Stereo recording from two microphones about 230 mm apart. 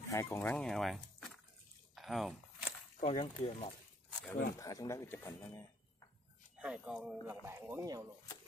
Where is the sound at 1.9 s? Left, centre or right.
Centre.